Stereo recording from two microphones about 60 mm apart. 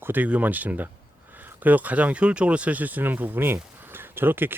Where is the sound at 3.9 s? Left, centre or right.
Right.